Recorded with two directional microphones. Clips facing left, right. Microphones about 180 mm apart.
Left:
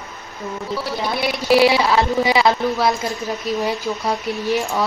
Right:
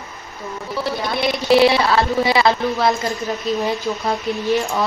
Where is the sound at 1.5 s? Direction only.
10° left (ahead or behind).